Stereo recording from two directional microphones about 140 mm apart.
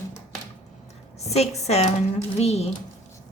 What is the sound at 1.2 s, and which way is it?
Speech, 50° left (ahead or behind).